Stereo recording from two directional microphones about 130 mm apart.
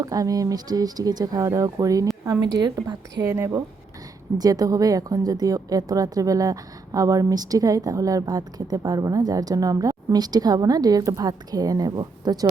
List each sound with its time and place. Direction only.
0.0 s a woman's voice: 30° right (ahead or behind)